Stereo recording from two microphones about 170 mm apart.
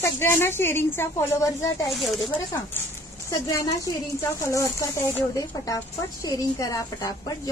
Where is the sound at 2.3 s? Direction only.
15° left (ahead or behind).